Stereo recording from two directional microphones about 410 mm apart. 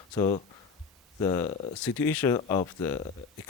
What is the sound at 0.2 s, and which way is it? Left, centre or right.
Speech, centre.